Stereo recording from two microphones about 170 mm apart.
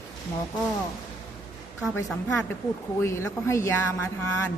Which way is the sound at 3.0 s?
15° left (ahead or behind).